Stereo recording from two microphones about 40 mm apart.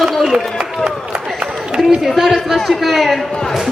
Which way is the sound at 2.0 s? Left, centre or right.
Centre.